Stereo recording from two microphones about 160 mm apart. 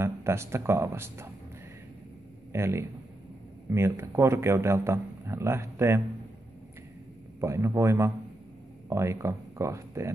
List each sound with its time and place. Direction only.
0.0 s speech: 15° right (ahead or behind)
2.5 s speech: 15° right (ahead or behind)
7.3 s speech: 15° right (ahead or behind)